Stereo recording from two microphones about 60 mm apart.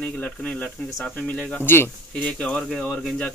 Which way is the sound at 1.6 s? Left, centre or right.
Left.